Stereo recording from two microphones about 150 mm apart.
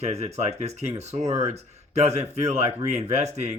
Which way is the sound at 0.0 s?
45° right (ahead or behind).